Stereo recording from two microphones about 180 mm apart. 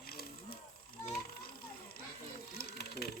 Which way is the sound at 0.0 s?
60° left (ahead or behind).